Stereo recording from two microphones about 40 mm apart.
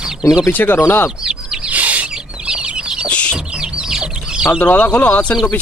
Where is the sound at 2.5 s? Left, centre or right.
Right.